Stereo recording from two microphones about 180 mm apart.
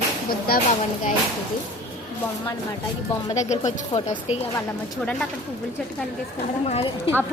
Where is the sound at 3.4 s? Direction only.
40° left (ahead or behind).